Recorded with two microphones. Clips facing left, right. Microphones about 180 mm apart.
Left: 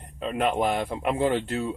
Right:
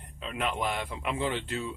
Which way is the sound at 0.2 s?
45° left (ahead or behind).